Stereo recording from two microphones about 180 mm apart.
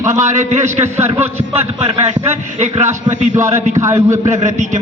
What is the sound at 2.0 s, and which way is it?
Speech, 40° right (ahead or behind).